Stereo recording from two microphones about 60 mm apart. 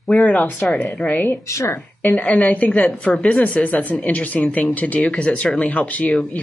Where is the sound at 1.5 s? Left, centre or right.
Left.